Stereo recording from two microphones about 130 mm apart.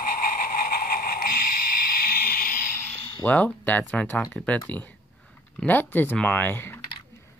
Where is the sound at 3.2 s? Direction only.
15° left (ahead or behind).